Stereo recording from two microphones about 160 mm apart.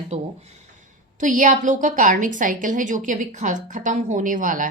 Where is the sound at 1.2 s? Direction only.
55° right (ahead or behind).